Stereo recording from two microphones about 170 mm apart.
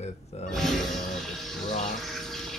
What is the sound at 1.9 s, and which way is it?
Water, centre (ahead or behind).